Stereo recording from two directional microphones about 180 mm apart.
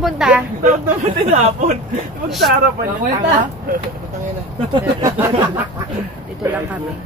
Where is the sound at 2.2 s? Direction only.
Centre (ahead or behind).